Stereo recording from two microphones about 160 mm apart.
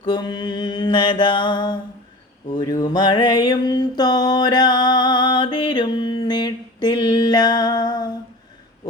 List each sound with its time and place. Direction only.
0.0 s mantra: 30° left (ahead or behind)
2.6 s music: 25° left (ahead or behind)